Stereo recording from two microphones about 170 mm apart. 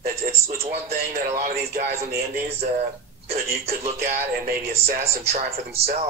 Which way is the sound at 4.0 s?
65° right (ahead or behind).